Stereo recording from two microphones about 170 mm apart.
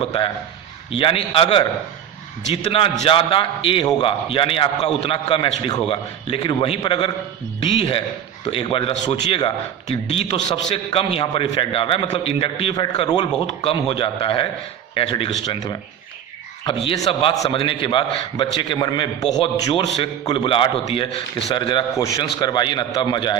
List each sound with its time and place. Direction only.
0.0 s a man's voice: 35° left (ahead or behind)